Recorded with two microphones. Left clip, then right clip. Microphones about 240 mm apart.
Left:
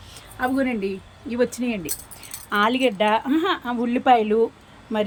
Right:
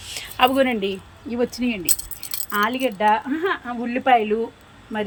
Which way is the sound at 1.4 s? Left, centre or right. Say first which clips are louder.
Right 2 dB; centre.